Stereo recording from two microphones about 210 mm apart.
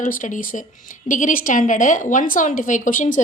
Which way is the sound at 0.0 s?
40° left (ahead or behind).